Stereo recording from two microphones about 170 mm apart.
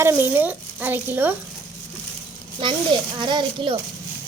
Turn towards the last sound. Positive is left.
turn(degrees=-25)  # may be behind; listen again after turning